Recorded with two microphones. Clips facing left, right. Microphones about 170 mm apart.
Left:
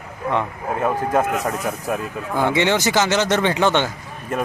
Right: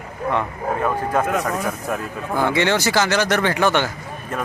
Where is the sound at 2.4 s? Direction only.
20° left (ahead or behind).